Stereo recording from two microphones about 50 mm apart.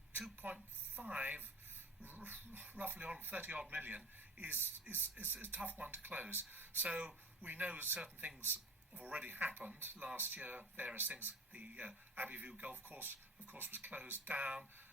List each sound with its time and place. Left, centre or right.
0.1 s a sound: right
0.9 s a man's voice: right
5.5 s a man's voice: right
6.8 s a man's voice: right
12.7 s a man's voice: right
13.4 s a man's voice: right